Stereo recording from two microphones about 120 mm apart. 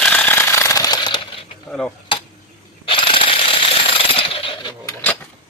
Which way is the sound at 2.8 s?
45° left (ahead or behind).